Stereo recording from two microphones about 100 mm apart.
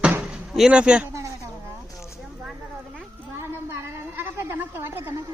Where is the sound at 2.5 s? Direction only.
Centre (ahead or behind).